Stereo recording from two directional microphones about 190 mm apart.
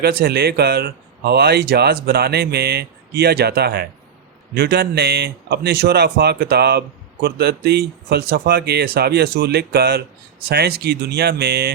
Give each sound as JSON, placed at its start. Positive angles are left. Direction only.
{"t": 0.0, "sound": "speech", "side_deg": -55}